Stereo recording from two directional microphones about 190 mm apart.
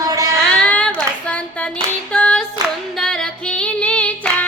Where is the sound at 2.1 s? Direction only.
5° left (ahead or behind).